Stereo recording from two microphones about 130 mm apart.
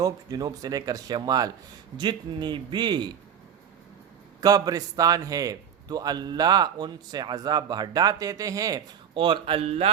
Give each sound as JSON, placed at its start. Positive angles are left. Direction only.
{"t": 0.0, "sound": "a man's voice", "side_deg": -30}
{"t": 4.4, "sound": "a man's voice", "side_deg": -30}
{"t": 9.1, "sound": "speech", "side_deg": -40}